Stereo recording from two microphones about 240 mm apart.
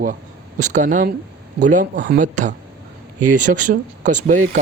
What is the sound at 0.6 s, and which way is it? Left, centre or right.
Speech, right.